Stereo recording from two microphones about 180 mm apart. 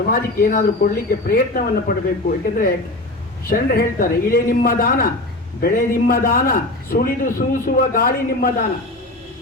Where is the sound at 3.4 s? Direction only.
55° left (ahead or behind).